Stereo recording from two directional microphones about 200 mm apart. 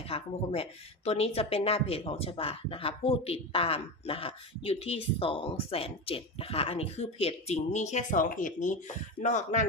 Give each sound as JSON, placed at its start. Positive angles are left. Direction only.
{"t": 0.1, "sound": "speech", "side_deg": 30}